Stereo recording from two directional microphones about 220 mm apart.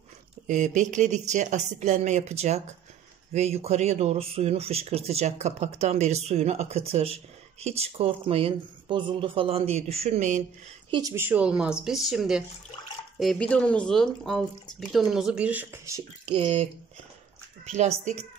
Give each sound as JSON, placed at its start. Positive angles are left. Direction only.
{"t": 0.5, "sound": "speech", "side_deg": -35}
{"t": 10.9, "sound": "speech", "side_deg": -15}
{"t": 17.7, "sound": "speech", "side_deg": -30}